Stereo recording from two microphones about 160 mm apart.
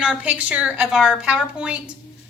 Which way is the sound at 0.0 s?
5° right (ahead or behind).